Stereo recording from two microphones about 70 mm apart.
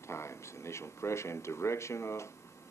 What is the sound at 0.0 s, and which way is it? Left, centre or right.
A man's voice, left.